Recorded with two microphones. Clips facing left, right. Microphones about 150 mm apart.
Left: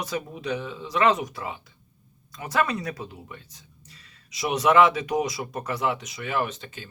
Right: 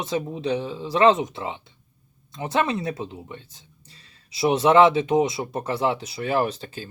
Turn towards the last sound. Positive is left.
turn(degrees=-35)  # may be behind; listen again after turning